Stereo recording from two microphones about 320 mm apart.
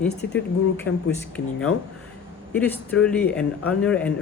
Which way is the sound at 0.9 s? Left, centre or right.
Left.